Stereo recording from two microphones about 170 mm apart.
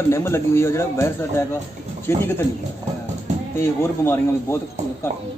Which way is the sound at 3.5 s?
15° left (ahead or behind).